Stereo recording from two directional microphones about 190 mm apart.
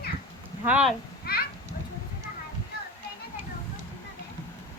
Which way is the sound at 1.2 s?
55° left (ahead or behind).